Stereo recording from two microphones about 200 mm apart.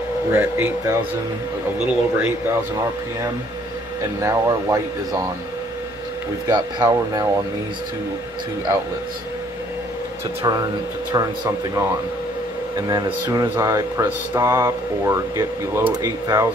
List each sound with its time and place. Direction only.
0.3 s speech: 10° right (ahead or behind)
4.2 s speech: 15° right (ahead or behind)
6.4 s speech: 20° right (ahead or behind)
11.1 s speech: 15° right (ahead or behind)
12.7 s speech: 20° right (ahead or behind)